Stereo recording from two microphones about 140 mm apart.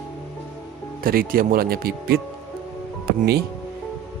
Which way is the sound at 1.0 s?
90° right.